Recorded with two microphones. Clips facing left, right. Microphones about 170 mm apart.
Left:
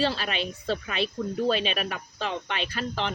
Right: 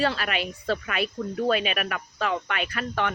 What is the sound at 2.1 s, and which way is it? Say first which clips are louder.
Speech: right 4 dB; 60° right (ahead or behind).